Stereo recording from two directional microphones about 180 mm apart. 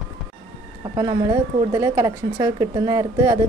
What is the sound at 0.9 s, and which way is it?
A woman's voice, 25° right (ahead or behind).